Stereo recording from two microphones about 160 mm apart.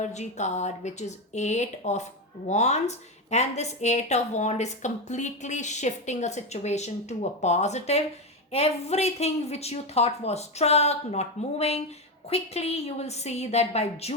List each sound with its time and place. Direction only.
0.0 s a woman's voice: 45° left (ahead or behind)